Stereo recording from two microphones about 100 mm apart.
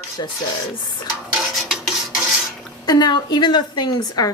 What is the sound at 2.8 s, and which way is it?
A woman's voice, 45° left (ahead or behind).